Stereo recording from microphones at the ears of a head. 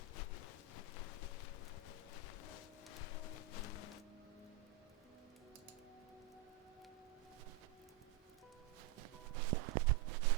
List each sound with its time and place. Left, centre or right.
0.2 s a sound: left
2.1 s music: left
9.0 s music: right